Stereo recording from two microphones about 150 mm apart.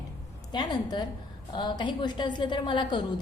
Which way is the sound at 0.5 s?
30° left (ahead or behind).